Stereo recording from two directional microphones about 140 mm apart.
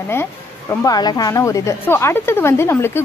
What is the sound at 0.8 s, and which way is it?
Speech, 30° left (ahead or behind).